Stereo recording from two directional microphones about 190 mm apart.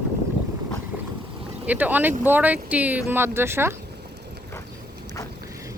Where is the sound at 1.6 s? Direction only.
10° right (ahead or behind).